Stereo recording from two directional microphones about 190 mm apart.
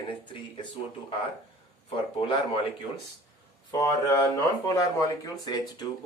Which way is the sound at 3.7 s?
15° left (ahead or behind).